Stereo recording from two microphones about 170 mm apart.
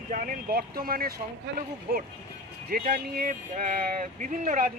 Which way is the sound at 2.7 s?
50° right (ahead or behind).